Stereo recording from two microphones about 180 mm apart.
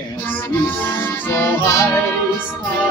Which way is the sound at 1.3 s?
15° left (ahead or behind).